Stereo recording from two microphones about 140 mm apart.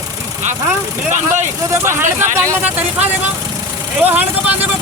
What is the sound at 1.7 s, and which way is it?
Speech, 20° right (ahead or behind).